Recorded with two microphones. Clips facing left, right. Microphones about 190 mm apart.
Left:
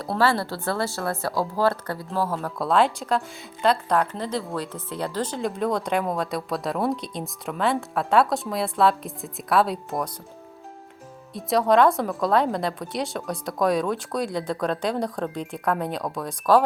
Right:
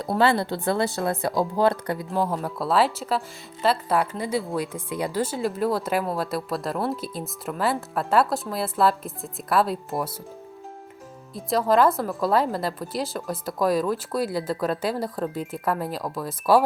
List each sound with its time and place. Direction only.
0.0 s speech: 20° right (ahead or behind)
2.6 s speech: 5° right (ahead or behind)
11.3 s speech: centre (ahead or behind)